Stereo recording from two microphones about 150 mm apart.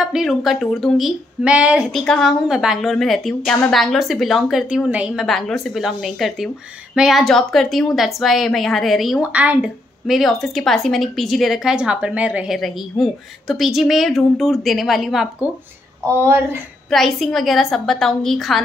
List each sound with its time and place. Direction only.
0.0 s a woman's voice: 5° right (ahead or behind)
16.2 s speech: 15° right (ahead or behind)
16.9 s a woman's voice: centre (ahead or behind)